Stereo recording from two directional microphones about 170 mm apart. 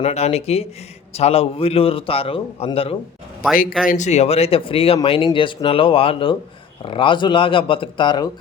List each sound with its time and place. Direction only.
0.0 s a man's voice: 40° left (ahead or behind)
3.8 s a man's voice: 45° left (ahead or behind); by 8.3 s 25° left (ahead or behind)